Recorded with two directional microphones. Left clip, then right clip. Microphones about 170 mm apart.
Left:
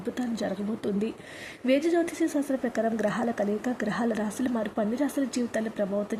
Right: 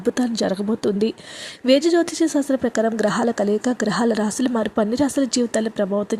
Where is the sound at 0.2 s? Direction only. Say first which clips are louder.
Right 9 dB; 35° right (ahead or behind).